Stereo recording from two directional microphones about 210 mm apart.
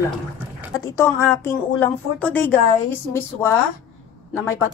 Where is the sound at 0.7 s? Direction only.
15° left (ahead or behind).